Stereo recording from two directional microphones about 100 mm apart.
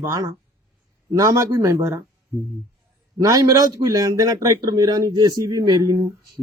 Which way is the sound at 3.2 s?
35° right (ahead or behind).